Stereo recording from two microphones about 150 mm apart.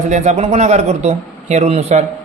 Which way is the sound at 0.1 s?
50° right (ahead or behind).